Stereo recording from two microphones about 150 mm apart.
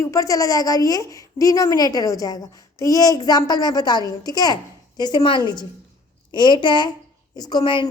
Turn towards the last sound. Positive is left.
turn(degrees=35)  # may be behind; listen again after turning